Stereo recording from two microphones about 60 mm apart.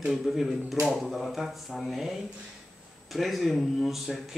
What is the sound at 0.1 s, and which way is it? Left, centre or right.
A woman's voice, centre.